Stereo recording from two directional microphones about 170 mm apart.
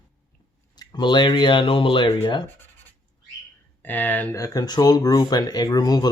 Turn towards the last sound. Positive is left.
turn(degrees=20)  # may be behind; listen again after turning